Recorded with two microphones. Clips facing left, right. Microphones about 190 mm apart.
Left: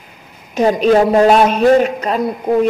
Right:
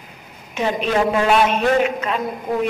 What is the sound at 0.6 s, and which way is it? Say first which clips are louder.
Speech: left 8 dB; 40° left (ahead or behind).